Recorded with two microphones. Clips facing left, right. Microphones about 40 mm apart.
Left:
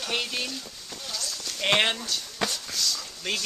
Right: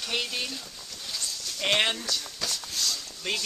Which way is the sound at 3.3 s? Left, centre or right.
Centre.